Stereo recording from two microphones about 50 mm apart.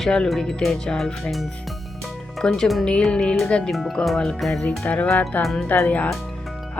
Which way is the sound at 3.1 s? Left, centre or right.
Centre.